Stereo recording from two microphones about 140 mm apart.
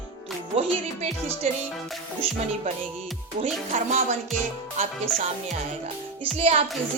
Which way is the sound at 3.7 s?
55° right (ahead or behind).